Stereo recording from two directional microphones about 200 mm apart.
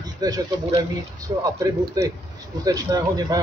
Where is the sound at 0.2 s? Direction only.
20° right (ahead or behind).